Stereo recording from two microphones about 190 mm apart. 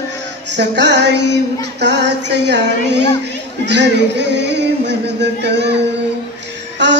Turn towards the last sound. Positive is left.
turn(degrees=-65)  # may be behind; listen again after turning